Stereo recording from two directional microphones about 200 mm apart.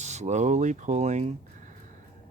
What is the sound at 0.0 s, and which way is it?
Speech, 35° right (ahead or behind).